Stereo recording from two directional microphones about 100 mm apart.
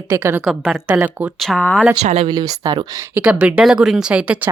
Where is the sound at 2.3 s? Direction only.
40° right (ahead or behind).